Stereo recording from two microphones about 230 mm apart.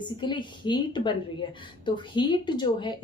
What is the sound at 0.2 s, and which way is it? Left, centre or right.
A woman's voice, centre.